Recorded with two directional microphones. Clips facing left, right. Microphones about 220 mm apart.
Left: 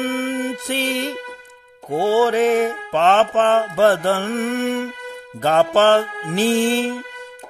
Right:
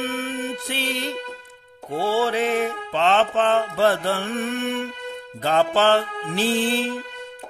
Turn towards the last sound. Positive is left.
turn(degrees=45)  # may be behind; listen again after turning